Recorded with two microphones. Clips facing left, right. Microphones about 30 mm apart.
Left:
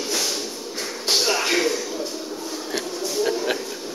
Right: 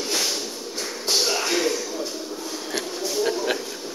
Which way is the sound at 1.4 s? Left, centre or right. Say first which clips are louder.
Left 2 dB; left.